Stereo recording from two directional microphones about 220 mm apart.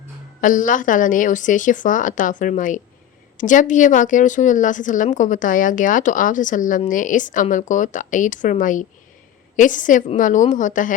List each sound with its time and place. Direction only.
0.4 s a woman's voice: 35° left (ahead or behind)